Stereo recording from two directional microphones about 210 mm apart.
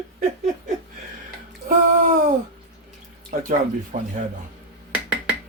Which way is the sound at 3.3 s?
40° right (ahead or behind).